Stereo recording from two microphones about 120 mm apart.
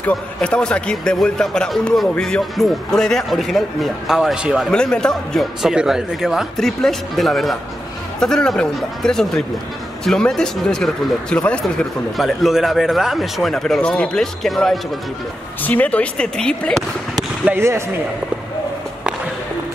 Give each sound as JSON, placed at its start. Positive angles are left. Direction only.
{"t": 0.0, "sound": "a man's voice", "side_deg": 10}
{"t": 4.6, "sound": "a man's voice", "side_deg": 5}
{"t": 15.6, "sound": "speech", "side_deg": 15}
{"t": 17.5, "sound": "speech", "side_deg": -20}